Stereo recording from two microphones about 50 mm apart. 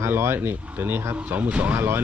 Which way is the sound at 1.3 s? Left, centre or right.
Right.